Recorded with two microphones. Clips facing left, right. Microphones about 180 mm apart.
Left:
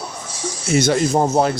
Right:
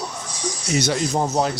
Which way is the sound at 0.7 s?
50° left (ahead or behind).